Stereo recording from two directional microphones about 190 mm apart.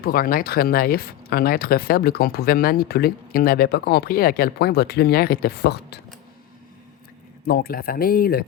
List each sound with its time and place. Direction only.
0.0 s speech: 50° left (ahead or behind)
7.4 s speech: 55° left (ahead or behind)